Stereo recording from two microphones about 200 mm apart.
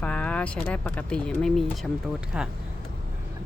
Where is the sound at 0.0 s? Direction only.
5° left (ahead or behind).